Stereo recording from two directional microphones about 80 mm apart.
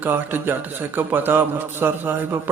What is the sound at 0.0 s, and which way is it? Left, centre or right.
A man's voice, right.